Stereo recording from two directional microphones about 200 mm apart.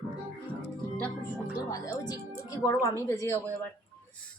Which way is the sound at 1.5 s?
15° left (ahead or behind).